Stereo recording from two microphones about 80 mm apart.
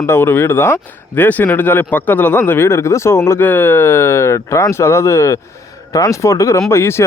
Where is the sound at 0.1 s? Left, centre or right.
Left.